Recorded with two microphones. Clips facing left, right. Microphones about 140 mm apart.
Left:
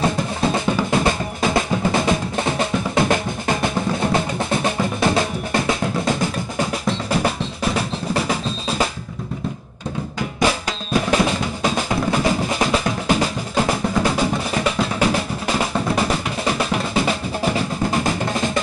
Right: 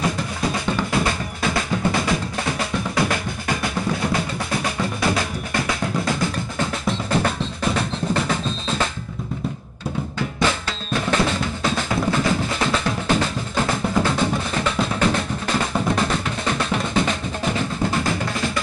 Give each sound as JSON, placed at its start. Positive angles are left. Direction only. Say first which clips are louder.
{"t": 0.0, "sound": "drum", "louder": "left 4 dB", "side_deg": 30}
{"t": 0.9, "sound": "percussion", "louder": "left 3 dB", "side_deg": 25}
{"t": 6.6, "sound": "music", "louder": "left 2 dB", "side_deg": 10}
{"t": 10.4, "sound": "drum", "louder": "left 3 dB", "side_deg": 15}
{"t": 17.9, "sound": "drum", "louder": "left 2 dB", "side_deg": 20}